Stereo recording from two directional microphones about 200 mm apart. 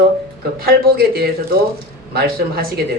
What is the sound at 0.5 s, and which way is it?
A man's voice, 50° right (ahead or behind).